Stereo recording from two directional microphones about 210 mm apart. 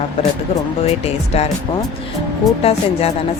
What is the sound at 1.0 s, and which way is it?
Speech, 30° left (ahead or behind).